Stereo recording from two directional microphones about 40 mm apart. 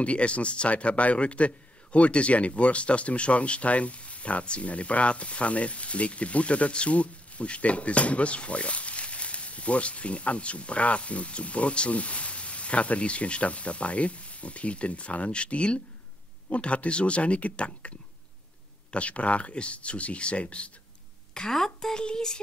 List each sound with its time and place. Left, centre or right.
0.0 s a man's voice: left
18.9 s a man's voice: left
21.3 s speech: centre